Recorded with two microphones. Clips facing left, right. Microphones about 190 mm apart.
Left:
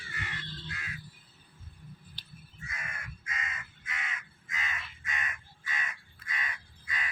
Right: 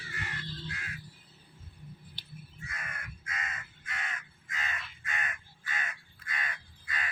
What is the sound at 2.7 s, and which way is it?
Crow, 60° right (ahead or behind).